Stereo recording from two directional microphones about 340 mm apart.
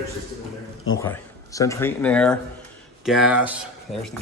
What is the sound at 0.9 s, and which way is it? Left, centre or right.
Speech, centre.